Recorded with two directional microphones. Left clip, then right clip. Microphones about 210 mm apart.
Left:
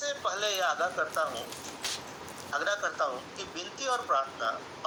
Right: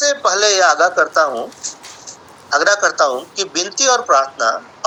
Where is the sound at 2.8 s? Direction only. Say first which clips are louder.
Right 16 dB; 35° right (ahead or behind).